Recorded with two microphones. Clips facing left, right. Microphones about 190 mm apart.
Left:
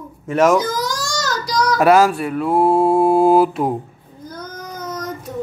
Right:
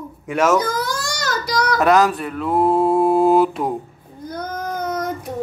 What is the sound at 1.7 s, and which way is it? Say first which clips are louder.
Mantra: left 3 dB; 10° left (ahead or behind).